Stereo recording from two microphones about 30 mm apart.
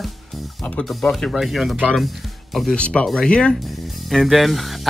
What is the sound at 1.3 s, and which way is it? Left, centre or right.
Speech, centre.